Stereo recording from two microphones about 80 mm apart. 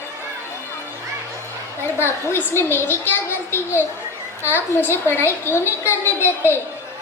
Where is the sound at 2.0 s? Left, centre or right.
Left.